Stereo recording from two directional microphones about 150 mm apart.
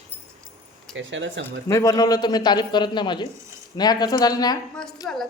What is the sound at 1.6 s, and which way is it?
A man's voice, 20° left (ahead or behind).